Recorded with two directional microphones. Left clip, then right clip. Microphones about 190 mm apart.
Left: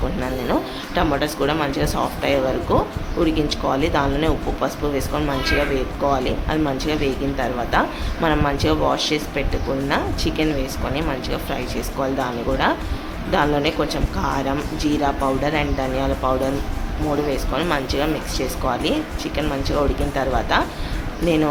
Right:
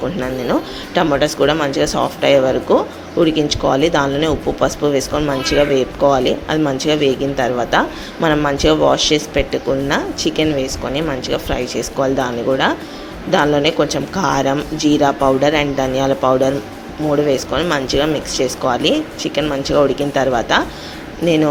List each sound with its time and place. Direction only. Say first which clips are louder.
0.2 s speech: right 3 dB; 15° right (ahead or behind)